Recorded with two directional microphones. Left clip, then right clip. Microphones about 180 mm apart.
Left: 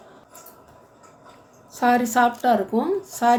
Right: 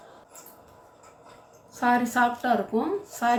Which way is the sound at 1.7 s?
45° left (ahead or behind).